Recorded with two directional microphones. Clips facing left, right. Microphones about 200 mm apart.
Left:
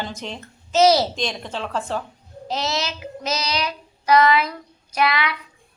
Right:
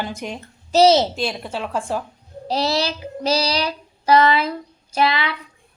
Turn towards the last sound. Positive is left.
turn(degrees=-30)  # may be behind; listen again after turning